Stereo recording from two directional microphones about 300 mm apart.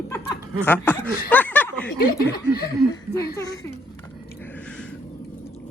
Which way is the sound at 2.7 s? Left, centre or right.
Centre.